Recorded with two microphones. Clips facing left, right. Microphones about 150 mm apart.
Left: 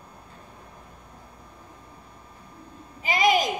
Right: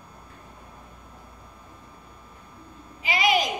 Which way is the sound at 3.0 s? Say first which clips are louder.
Left 2 dB; 45° left (ahead or behind).